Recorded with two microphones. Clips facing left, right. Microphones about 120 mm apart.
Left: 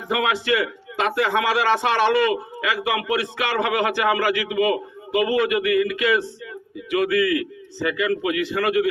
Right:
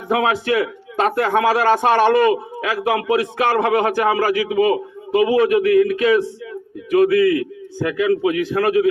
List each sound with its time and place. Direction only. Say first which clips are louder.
0.1 s a man's voice: right 4 dB; 40° right (ahead or behind)